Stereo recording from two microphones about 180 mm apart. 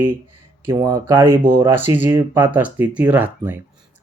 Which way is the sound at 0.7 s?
20° right (ahead or behind).